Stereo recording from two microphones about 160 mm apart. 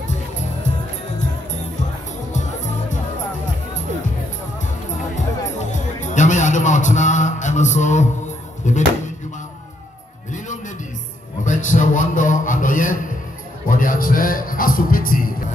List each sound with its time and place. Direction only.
2.3 s music: 50° left (ahead or behind)
5.1 s music: 50° left (ahead or behind)
8.6 s speech: 50° left (ahead or behind)
11.4 s a sound: 50° left (ahead or behind)
13.7 s music: 60° left (ahead or behind)